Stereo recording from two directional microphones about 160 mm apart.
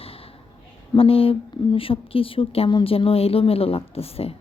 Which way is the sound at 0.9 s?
35° left (ahead or behind).